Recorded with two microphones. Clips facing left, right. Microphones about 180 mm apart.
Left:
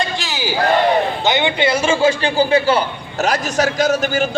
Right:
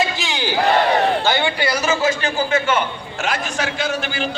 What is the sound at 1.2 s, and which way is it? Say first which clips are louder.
A man's voice: left 3 dB; 20° left (ahead or behind).